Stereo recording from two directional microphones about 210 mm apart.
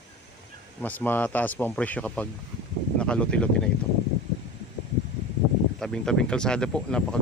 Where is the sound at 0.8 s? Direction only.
10° left (ahead or behind).